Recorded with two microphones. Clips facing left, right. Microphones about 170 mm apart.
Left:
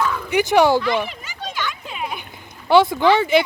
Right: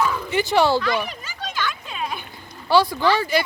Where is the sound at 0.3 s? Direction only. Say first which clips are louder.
Left 5 dB; 15° left (ahead or behind).